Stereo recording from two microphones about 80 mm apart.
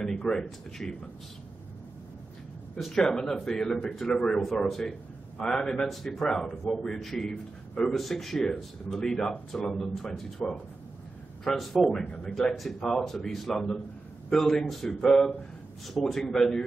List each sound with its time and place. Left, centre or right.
0.3 s a man's voice: centre
2.8 s a man's voice: centre
6.4 s a man's voice: left
6.7 s a man's voice: centre
12.0 s a man's voice: centre
12.4 s a man's voice: centre